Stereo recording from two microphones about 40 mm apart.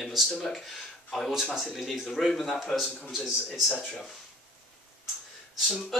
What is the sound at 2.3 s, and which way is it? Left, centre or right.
Speech, centre.